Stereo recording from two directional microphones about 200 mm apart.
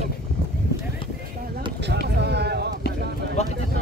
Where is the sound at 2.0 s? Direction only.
55° right (ahead or behind).